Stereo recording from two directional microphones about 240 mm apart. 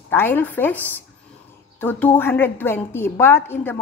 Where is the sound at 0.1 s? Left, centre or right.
Centre.